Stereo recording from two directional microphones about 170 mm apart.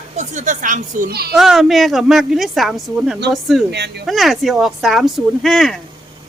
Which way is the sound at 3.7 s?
75° right (ahead or behind).